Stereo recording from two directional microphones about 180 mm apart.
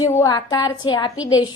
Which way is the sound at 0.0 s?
20° left (ahead or behind).